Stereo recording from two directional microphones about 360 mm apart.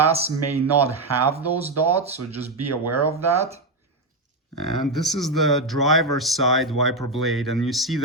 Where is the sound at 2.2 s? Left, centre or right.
Right.